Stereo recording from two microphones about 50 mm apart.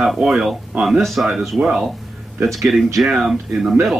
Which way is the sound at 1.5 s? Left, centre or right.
Right.